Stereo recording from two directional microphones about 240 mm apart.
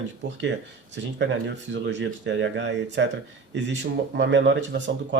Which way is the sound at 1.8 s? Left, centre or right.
Right.